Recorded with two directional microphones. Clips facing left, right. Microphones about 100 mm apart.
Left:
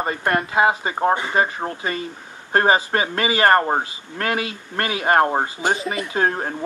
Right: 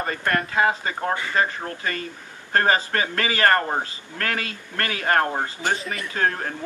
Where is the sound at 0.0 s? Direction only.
20° left (ahead or behind).